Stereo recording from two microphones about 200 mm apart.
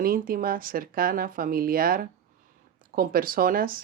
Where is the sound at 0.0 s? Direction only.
45° right (ahead or behind).